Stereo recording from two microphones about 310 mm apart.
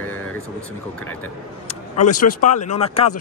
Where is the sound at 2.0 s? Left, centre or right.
Left.